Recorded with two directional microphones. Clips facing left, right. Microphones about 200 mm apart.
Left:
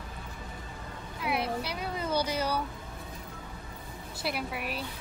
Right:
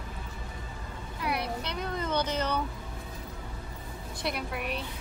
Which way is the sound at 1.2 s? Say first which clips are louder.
Left 1 dB; centre (ahead or behind).